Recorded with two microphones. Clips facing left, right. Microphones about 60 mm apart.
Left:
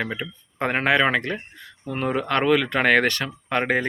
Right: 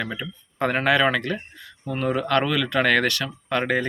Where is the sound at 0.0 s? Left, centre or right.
Left.